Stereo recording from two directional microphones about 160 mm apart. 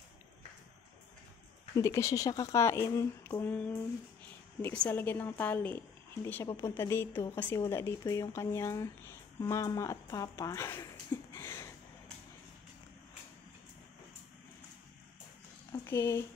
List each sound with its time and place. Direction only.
1.8 s a woman's voice: 20° left (ahead or behind)
11.3 s a sound: 20° left (ahead or behind)
15.8 s speech: 15° left (ahead or behind)